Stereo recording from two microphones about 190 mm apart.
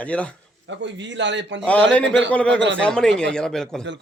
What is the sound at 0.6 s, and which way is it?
A man's voice, 70° right (ahead or behind).